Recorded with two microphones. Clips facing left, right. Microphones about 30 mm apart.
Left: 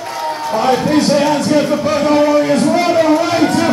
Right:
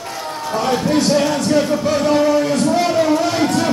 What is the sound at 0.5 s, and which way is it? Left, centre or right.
Speech, centre.